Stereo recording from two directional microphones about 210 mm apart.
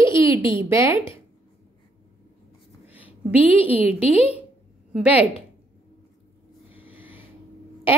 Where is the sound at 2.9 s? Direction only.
5° right (ahead or behind).